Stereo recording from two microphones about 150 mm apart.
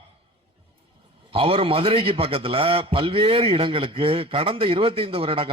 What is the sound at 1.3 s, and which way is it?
A man's voice, 35° right (ahead or behind).